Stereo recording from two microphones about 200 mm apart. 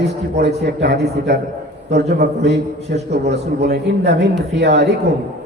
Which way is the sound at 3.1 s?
55° right (ahead or behind).